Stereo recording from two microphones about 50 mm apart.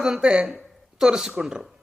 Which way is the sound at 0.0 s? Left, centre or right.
Centre.